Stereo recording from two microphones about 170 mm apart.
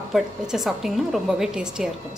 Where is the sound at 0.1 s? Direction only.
Centre (ahead or behind).